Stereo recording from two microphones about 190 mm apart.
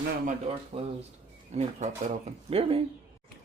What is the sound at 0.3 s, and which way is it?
Speech, 30° right (ahead or behind).